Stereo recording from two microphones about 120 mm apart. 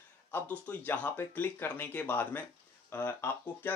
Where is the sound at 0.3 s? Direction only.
15° left (ahead or behind).